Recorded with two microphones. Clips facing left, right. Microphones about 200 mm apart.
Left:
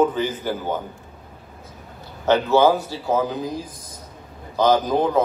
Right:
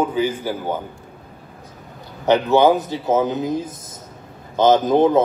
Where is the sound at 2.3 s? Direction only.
15° right (ahead or behind).